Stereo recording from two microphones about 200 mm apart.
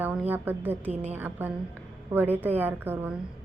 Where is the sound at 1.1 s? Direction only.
10° right (ahead or behind).